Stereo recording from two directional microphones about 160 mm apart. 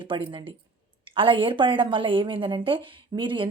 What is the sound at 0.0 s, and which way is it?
A woman's voice, 30° right (ahead or behind).